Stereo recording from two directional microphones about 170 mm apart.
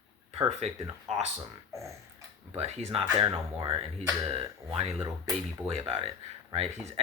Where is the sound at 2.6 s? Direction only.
35° right (ahead or behind).